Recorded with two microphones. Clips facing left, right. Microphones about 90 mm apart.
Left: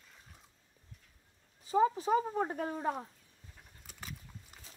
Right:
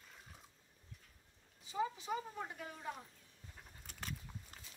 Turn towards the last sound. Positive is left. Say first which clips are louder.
# right 1 dB
turn(degrees=5)  # may be behind; listen again after turning